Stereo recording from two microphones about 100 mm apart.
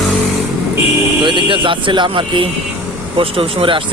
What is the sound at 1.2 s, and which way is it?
Speech, 55° right (ahead or behind).